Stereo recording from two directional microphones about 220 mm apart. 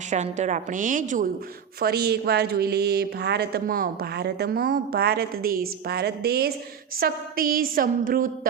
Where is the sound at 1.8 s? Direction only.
45° right (ahead or behind).